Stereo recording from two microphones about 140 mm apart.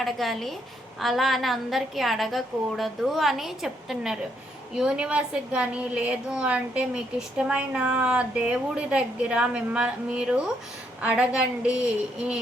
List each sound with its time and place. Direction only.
0.0 s a woman's voice: centre (ahead or behind)